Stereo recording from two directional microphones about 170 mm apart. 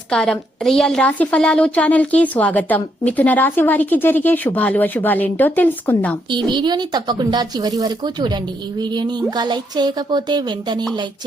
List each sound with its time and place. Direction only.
0.1 s a woman's voice: 5° left (ahead or behind)
6.3 s a woman's voice: 25° right (ahead or behind)